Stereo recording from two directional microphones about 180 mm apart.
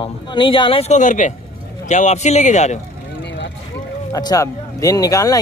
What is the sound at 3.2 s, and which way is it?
Vehicle, 75° left (ahead or behind).